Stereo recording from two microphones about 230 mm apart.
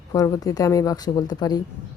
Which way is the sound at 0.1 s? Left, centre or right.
Centre.